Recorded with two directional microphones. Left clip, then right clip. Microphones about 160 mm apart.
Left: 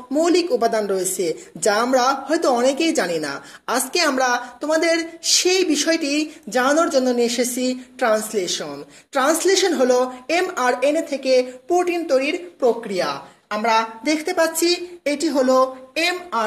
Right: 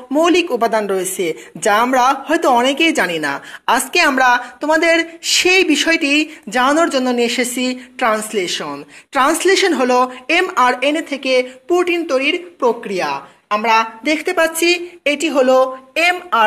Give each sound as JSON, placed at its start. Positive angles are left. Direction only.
{"t": 0.1, "sound": "a woman's voice", "side_deg": -30}